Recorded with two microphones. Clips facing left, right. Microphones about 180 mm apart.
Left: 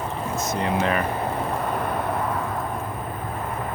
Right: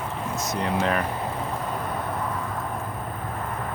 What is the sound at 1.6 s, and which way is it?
Vehicle, 65° left (ahead or behind).